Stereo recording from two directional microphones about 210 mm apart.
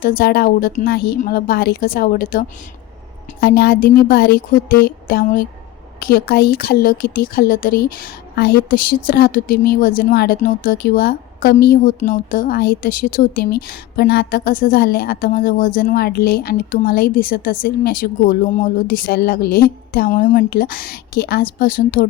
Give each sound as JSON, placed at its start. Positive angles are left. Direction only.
{"t": 0.0, "sound": "a woman's voice", "side_deg": 45}
{"t": 3.4, "sound": "a woman's voice", "side_deg": 45}